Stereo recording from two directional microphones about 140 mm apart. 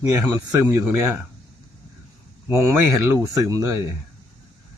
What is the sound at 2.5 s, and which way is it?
Speech, 20° right (ahead or behind).